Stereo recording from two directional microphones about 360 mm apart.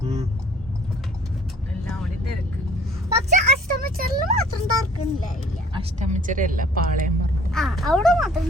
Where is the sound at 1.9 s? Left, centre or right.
Centre.